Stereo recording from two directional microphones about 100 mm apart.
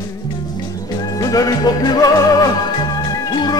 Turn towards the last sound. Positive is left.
turn(degrees=45)  # may be behind; listen again after turning